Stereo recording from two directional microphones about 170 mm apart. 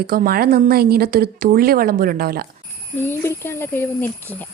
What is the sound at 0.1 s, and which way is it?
A woman's voice, 60° right (ahead or behind).